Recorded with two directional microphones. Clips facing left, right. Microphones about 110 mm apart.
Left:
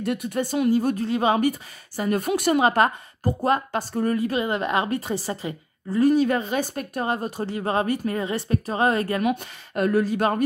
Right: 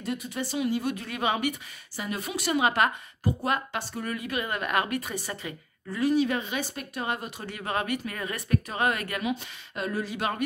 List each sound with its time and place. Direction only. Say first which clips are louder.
0.0 s a woman's voice: left 7 dB; 60° left (ahead or behind); by 1.5 s 35° left (ahead or behind)
2.0 s speech: left 9 dB; 50° left (ahead or behind)
2.6 s a woman's voice: left 5 dB; 35° left (ahead or behind)
5.9 s a woman's voice: left 6 dB; 45° left (ahead or behind)
9.2 s speech: left 6 dB; 55° left (ahead or behind)
10.0 s a woman's voice: left 8 dB; 40° left (ahead or behind)